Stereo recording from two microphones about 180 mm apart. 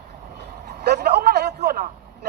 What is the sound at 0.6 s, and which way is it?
A man's voice, 65° right (ahead or behind).